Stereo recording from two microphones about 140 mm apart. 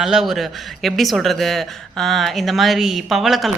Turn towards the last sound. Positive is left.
turn(degrees=0)  # may be behind; listen again after turning